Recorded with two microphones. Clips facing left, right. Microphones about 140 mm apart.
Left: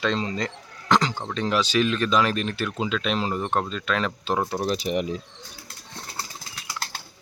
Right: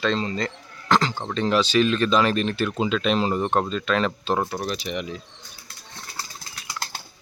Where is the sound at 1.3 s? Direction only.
10° left (ahead or behind).